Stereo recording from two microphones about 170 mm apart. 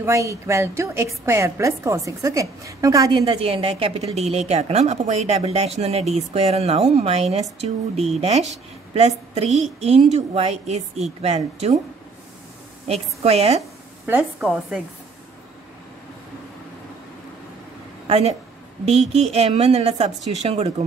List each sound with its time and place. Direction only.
0.0 s a woman's voice: 15° right (ahead or behind); by 11.7 s 40° right (ahead or behind)
12.8 s a woman's voice: 35° right (ahead or behind)
13.6 s a sound: 15° right (ahead or behind)
14.4 s speech: centre (ahead or behind)
18.0 s a woman's voice: 35° right (ahead or behind)